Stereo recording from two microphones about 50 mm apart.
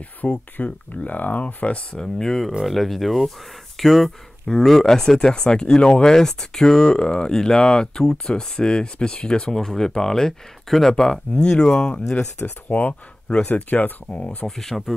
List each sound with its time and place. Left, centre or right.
0.2 s speech: left
2.0 s speech: centre
12.6 s speech: left
14.1 s speech: left
14.6 s speech: centre